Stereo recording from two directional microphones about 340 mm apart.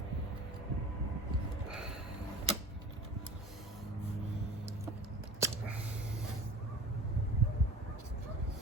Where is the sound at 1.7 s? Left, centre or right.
Centre.